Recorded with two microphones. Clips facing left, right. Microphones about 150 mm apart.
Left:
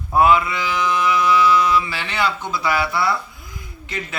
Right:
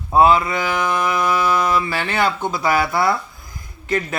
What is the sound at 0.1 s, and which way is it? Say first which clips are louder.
A man's voice: right 2 dB; 30° right (ahead or behind).